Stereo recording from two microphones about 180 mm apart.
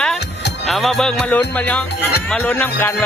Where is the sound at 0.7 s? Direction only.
Centre (ahead or behind).